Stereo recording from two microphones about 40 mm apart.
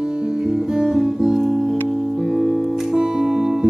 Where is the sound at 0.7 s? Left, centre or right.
Centre.